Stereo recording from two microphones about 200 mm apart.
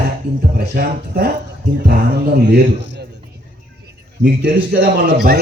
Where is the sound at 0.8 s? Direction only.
50° right (ahead or behind).